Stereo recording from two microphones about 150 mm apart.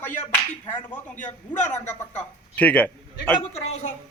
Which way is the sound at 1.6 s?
50° left (ahead or behind).